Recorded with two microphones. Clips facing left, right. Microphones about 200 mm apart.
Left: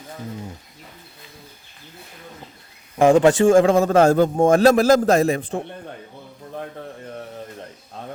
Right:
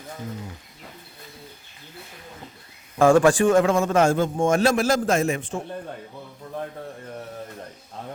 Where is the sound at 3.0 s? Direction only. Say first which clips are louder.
Left 2 dB; 20° left (ahead or behind); by 5.4 s 35° left (ahead or behind).